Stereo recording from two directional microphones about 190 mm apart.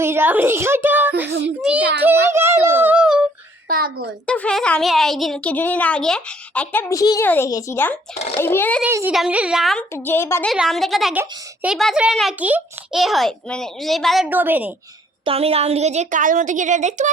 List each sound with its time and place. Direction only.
0.0 s a woman's voice: 10° right (ahead or behind)
1.3 s a child's voice: 65° right (ahead or behind)
2.0 s a sound: 10° right (ahead or behind)
3.7 s a woman's voice: 50° right (ahead or behind)
4.3 s speech: 5° left (ahead or behind)
8.8 s a woman's voice: 10° right (ahead or behind)
9.9 s speech: 10° left (ahead or behind)
10.5 s a child's voice: centre (ahead or behind)
15.2 s a woman's voice: 30° right (ahead or behind)